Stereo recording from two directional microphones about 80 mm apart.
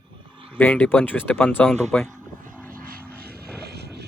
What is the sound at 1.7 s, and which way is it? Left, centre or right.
Speech, centre.